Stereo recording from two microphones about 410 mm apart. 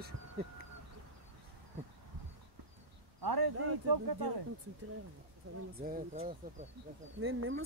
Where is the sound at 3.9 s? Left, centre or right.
Right.